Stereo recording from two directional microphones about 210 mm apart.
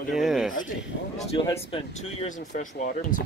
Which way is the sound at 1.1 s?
30° left (ahead or behind).